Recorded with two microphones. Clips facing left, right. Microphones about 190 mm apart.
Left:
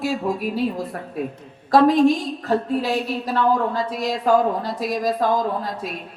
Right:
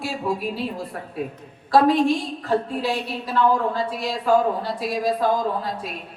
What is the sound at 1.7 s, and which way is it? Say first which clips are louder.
A woman's voice: left 2 dB; 40° left (ahead or behind).